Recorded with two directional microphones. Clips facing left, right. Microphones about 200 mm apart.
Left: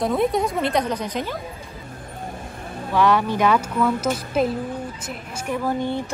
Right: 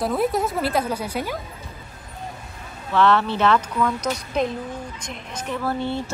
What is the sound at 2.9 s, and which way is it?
Speech, 10° left (ahead or behind).